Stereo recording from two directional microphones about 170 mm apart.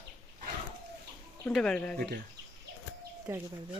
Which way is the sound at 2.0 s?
80° right.